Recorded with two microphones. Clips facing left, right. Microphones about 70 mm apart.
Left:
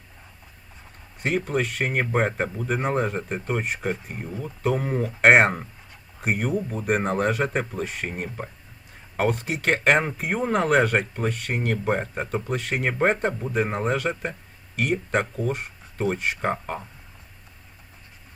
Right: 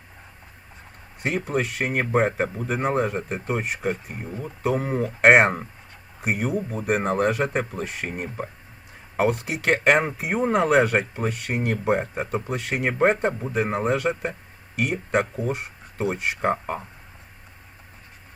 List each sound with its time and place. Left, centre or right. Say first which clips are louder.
1.2 s speech: even; centre